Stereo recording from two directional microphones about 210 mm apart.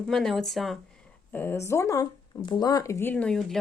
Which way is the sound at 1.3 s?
10° left (ahead or behind).